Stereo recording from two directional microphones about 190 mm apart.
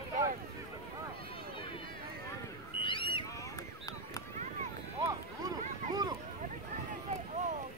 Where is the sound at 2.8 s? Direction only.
25° left (ahead or behind).